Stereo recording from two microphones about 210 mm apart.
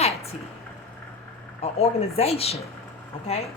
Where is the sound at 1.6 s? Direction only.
30° left (ahead or behind).